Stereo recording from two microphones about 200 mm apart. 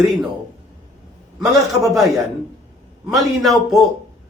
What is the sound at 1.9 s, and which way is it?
Speech, centre (ahead or behind).